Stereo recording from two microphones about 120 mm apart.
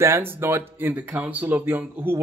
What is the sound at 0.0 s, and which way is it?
Speech, 20° right (ahead or behind).